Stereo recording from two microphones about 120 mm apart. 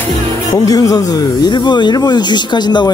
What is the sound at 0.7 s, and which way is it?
Speech, 30° left (ahead or behind).